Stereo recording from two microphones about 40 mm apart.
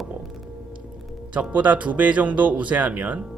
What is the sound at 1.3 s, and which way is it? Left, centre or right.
Speech, right.